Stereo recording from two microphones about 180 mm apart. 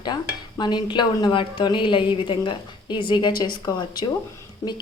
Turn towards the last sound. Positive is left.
turn(degrees=15)  # may be behind; listen again after turning